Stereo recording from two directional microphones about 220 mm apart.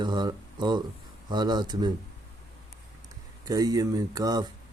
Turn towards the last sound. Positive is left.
turn(degrees=-15)  # may be behind; listen again after turning